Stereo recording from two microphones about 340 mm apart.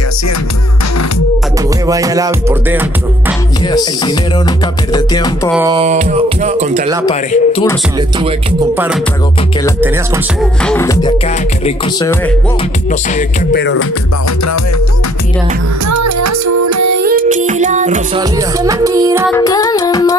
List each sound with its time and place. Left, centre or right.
1.9 s music: centre
3.6 s music: centre
5.5 s music: centre
5.8 s music: right
7.1 s music: centre
9.8 s music: centre
13.5 s music: left
15.9 s music: right
17.0 s music: right
19.3 s music: centre